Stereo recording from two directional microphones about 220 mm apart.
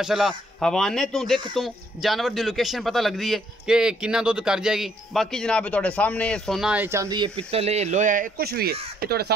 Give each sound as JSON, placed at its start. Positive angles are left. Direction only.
{"t": 0.0, "sound": "speech", "side_deg": 0}